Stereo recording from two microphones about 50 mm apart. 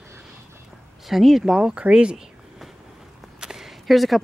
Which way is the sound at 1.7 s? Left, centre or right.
Right.